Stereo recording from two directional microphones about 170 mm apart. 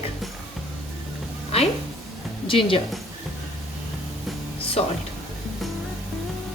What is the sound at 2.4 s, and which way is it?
Speech, 30° left (ahead or behind).